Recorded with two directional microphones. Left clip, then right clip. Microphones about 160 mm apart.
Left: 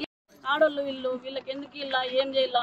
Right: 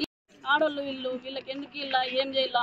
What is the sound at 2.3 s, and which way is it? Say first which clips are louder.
Speech: left 2 dB; 40° left (ahead or behind).